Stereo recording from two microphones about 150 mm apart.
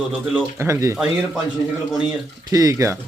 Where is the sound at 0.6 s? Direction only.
20° right (ahead or behind).